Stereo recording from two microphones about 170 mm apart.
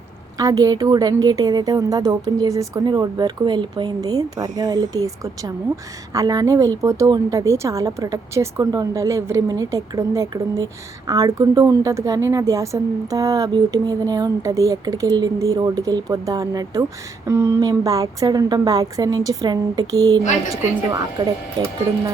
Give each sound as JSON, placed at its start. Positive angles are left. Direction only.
{"t": 0.3, "sound": "speech", "side_deg": -20}